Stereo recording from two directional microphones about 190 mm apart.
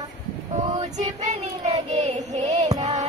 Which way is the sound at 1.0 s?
35° right (ahead or behind).